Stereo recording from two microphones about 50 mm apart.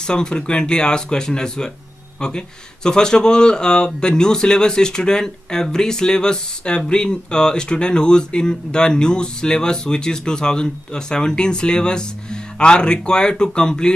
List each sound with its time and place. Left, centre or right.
0.0 s speech: centre